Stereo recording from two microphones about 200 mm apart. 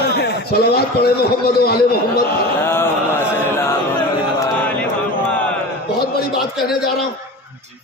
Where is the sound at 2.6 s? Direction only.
10° left (ahead or behind).